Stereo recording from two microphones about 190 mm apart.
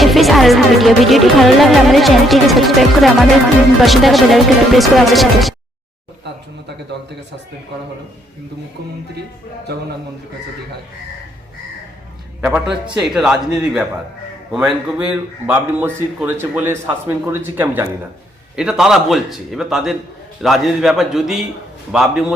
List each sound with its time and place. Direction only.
0.0 s music: centre (ahead or behind)
9.7 s a man's voice: 55° right (ahead or behind)
12.4 s music: 5° right (ahead or behind)
14.5 s a man's voice: 5° right (ahead or behind)
18.5 s music: 5° right (ahead or behind)